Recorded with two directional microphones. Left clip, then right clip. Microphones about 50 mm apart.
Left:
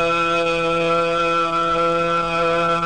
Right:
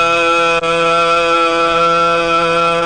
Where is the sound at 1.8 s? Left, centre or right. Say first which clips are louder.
Right 7 dB; left.